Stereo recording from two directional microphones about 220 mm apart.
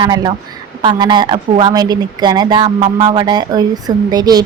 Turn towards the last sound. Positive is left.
turn(degrees=-20)  # may be behind; listen again after turning